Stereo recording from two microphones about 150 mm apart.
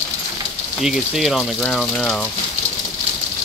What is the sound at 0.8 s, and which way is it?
Speech, centre (ahead or behind).